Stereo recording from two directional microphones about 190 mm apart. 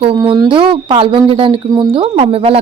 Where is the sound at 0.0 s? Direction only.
25° right (ahead or behind).